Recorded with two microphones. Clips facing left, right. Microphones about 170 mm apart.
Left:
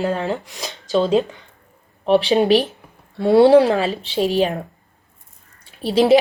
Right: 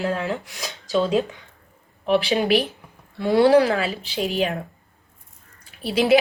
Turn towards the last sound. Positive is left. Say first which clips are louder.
# left 4 dB
turn(degrees=35)  # may be behind; listen again after turning